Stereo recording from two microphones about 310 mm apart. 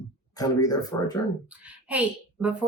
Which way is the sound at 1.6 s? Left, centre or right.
Centre.